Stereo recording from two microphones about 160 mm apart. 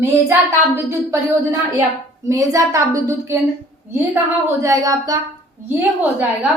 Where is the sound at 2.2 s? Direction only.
20° right (ahead or behind).